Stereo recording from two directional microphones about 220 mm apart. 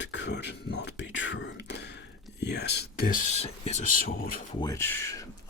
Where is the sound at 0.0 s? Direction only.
55° left (ahead or behind).